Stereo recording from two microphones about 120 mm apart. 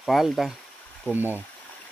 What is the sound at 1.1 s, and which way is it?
Speech, 15° right (ahead or behind).